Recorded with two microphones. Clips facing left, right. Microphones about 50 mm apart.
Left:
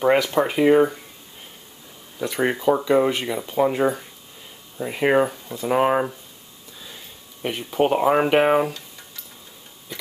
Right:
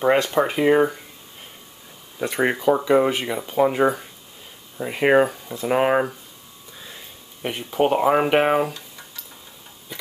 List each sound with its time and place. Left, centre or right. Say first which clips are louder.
0.0 s speech: even; centre
2.1 s speech: right 1 dB; centre
2.6 s speech: even; centre
7.4 s speech: even; centre